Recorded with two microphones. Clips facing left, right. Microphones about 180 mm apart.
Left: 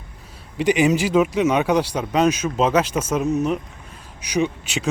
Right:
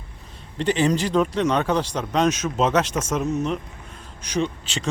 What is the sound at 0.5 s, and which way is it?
Speech, 10° left (ahead or behind).